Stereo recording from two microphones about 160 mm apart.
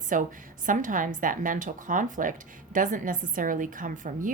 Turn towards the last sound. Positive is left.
turn(degrees=-55)  # may be behind; listen again after turning